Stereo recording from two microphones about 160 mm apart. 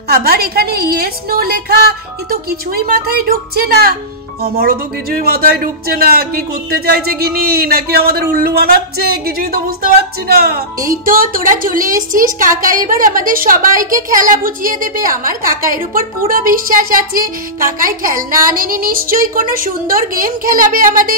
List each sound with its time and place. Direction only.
0.1 s a woman's voice: 75° right (ahead or behind)
5.2 s a woman's voice: 75° right (ahead or behind); by 21.2 s 60° right (ahead or behind)